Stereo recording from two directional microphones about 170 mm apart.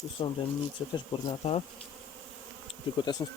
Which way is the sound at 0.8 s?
15° left (ahead or behind).